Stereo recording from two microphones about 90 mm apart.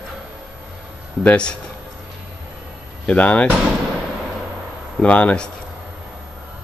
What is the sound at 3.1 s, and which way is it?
Speech, 15° left (ahead or behind).